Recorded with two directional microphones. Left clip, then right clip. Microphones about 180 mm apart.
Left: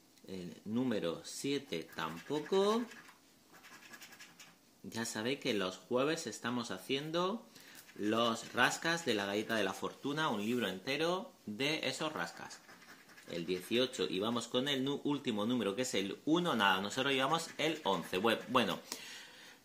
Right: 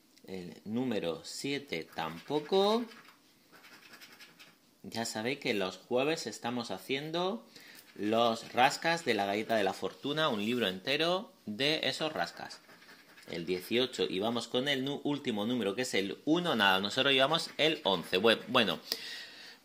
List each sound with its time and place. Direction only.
0.3 s speech: 25° right (ahead or behind)
4.9 s speech: 25° right (ahead or behind); by 19.2 s 40° right (ahead or behind)